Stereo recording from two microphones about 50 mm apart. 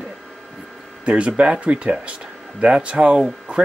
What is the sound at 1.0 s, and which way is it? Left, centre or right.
Speech, right.